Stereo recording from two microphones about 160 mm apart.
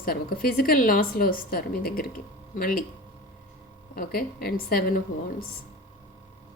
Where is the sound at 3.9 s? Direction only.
65° left (ahead or behind).